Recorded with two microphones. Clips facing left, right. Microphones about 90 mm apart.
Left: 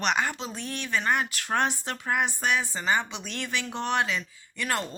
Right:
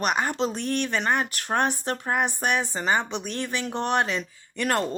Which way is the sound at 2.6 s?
20° right (ahead or behind).